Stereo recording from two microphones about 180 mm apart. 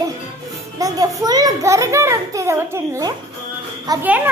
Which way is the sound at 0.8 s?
20° right (ahead or behind).